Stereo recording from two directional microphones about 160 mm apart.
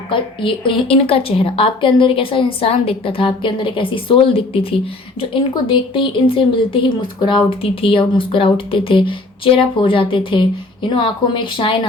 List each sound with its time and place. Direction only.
0.1 s a woman's voice: 30° left (ahead or behind)